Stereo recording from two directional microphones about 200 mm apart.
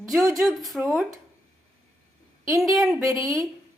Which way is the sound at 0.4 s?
Centre (ahead or behind).